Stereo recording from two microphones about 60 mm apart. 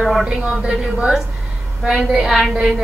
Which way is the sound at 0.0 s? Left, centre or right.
Centre.